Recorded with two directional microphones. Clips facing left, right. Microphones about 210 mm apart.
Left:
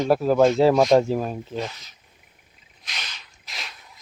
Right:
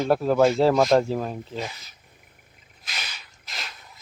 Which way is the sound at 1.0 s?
15° left (ahead or behind).